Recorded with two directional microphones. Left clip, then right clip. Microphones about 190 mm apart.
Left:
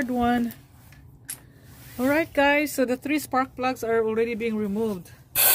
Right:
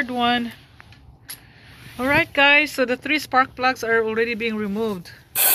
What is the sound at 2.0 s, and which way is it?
Speech, 10° left (ahead or behind).